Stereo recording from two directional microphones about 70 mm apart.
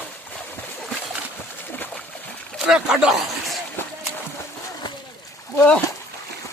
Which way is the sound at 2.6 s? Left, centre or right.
Centre.